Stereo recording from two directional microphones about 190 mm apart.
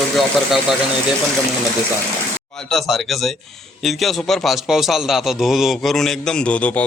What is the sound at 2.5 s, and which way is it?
Speech, 5° left (ahead or behind).